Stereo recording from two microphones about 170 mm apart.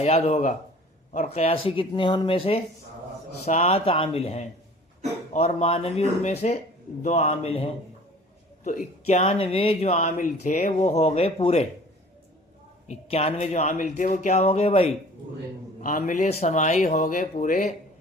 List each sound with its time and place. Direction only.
0.0 s speech: 40° left (ahead or behind)
12.9 s speech: 35° left (ahead or behind)
15.8 s a man's voice: 50° left (ahead or behind)